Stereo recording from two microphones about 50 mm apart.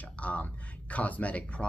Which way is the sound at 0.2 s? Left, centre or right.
Left.